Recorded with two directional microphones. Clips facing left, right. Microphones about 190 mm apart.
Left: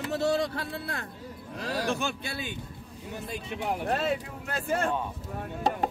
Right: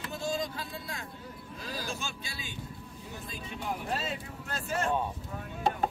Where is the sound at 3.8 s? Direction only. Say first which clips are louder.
Left 7 dB; 60° left (ahead or behind).